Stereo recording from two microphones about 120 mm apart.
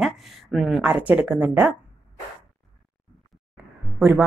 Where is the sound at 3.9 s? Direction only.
15° right (ahead or behind).